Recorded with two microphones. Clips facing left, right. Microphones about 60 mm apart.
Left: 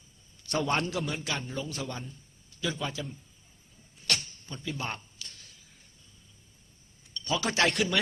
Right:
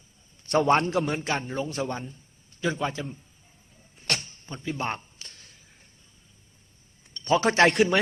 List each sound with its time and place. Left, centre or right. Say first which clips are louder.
0.4 s a man's voice: right 8 dB; right
3.9 s a sound: right 2 dB; right
7.1 s a man's voice: right 8 dB; right